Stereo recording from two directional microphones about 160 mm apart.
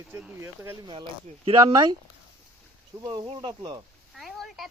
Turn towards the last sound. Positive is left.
turn(degrees=0)  # may be behind; listen again after turning